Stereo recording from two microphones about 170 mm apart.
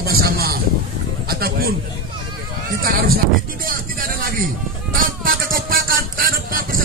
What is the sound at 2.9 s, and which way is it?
Speech, 60° right (ahead or behind).